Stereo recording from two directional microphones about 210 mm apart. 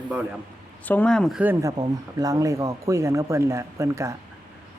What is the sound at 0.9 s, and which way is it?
Speech, 5° left (ahead or behind).